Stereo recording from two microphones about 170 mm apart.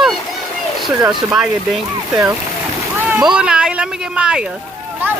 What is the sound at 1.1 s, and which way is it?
Speech, 5° right (ahead or behind).